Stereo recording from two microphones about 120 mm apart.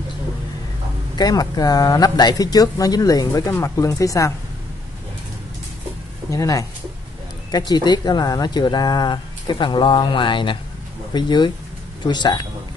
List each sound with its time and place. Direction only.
1.1 s speech: 35° left (ahead or behind)
6.3 s speech: 30° left (ahead or behind)